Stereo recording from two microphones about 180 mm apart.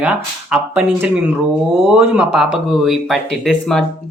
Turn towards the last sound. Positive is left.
turn(degrees=5)  # may be behind; listen again after turning